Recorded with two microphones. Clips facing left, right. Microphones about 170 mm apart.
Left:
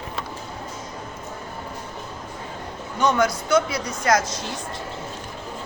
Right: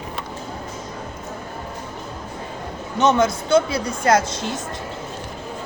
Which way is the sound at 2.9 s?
25° right (ahead or behind).